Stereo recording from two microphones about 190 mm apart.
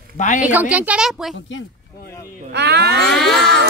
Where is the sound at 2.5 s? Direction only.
60° right (ahead or behind).